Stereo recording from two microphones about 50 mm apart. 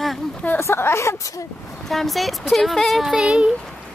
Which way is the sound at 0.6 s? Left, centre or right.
Left.